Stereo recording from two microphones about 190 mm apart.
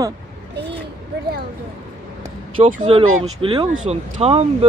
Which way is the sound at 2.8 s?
30° right (ahead or behind).